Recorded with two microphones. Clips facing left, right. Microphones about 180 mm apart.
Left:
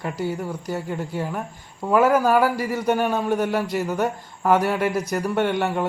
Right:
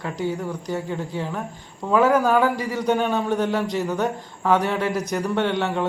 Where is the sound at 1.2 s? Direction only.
15° left (ahead or behind).